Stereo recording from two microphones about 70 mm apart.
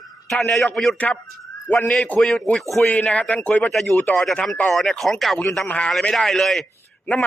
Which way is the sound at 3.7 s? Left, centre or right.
Centre.